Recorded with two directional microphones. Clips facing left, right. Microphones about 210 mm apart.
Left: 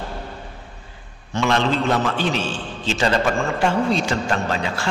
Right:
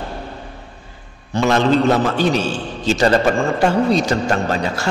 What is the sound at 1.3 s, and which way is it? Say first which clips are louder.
A man's voice: right 5 dB; 40° right (ahead or behind).